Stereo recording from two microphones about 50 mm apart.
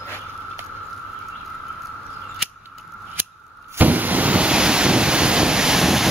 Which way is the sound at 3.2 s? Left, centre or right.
Right.